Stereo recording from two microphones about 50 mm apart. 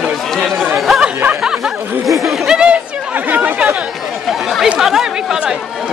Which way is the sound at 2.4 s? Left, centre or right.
Centre.